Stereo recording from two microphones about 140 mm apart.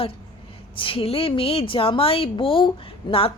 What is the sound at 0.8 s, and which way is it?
A woman's voice, 40° left (ahead or behind).